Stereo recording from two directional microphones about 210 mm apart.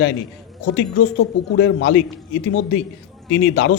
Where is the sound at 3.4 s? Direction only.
65° left (ahead or behind).